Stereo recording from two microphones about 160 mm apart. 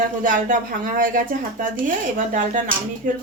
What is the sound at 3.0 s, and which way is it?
Speech, 55° right (ahead or behind).